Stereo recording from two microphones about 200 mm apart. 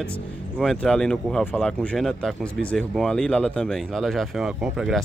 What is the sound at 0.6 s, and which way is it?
Speech, centre (ahead or behind).